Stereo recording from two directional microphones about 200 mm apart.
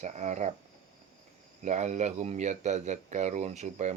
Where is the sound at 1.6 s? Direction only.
35° right (ahead or behind).